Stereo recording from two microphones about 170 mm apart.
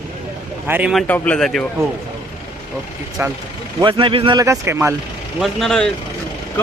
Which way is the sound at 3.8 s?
30° right (ahead or behind).